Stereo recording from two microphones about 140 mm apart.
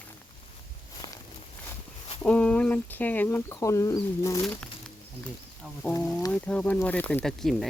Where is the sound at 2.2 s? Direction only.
10° left (ahead or behind); by 4.4 s 25° left (ahead or behind).